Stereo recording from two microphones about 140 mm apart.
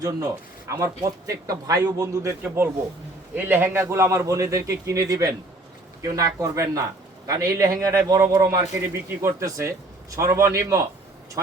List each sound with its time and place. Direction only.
0.0 s a man's voice: 25° right (ahead or behind)
3.3 s a man's voice: 15° right (ahead or behind)